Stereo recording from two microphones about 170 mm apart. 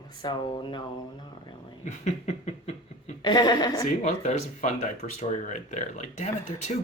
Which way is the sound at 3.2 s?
25° left (ahead or behind).